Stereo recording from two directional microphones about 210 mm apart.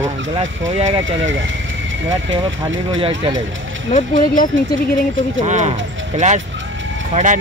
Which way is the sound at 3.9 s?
40° left (ahead or behind).